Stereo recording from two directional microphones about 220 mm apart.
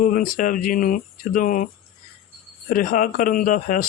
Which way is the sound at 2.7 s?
40° left (ahead or behind).